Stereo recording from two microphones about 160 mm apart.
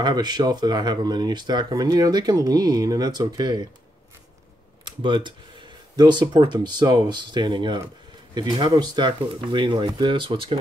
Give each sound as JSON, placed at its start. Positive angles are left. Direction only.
{"t": 0.0, "sound": "speech", "side_deg": -25}
{"t": 4.8, "sound": "speech", "side_deg": -30}